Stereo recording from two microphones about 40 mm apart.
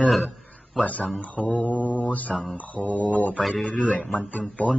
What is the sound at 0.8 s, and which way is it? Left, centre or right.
Speech, left.